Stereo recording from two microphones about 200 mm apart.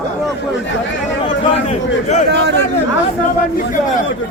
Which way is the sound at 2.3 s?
60° right (ahead or behind).